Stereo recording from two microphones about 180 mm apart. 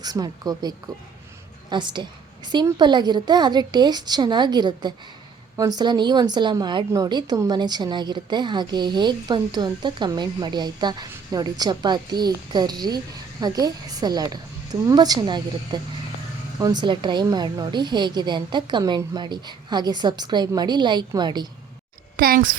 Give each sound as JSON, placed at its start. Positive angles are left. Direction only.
{"t": 0.0, "sound": "a woman's voice", "side_deg": -20}
{"t": 1.7, "sound": "a woman's voice", "side_deg": -25}
{"t": 22.2, "sound": "speech", "side_deg": -50}